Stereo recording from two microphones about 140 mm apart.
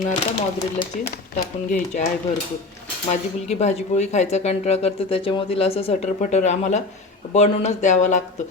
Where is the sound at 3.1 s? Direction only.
55° left (ahead or behind).